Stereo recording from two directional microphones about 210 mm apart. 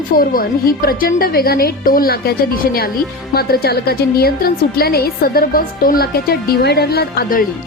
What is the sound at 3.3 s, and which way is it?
A woman's voice, 45° left (ahead or behind).